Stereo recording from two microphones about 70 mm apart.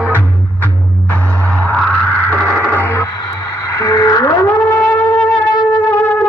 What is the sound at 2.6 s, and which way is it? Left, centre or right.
Music, left.